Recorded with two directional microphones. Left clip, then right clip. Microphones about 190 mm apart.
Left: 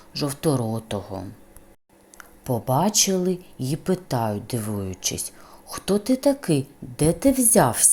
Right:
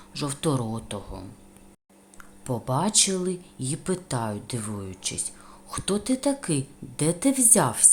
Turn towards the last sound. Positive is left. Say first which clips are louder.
# left 4 dB
turn(degrees=20)  # may be behind; listen again after turning